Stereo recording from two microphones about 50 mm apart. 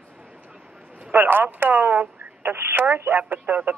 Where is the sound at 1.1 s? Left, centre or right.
Right.